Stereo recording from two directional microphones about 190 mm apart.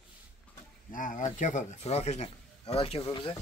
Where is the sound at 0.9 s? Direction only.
45° left (ahead or behind).